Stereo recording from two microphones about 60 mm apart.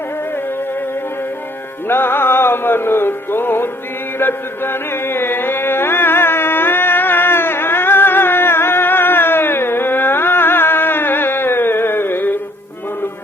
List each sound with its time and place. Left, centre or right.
1.9 s music: left